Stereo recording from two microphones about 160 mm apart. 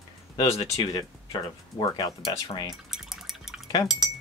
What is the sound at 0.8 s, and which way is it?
Speech, 30° left (ahead or behind).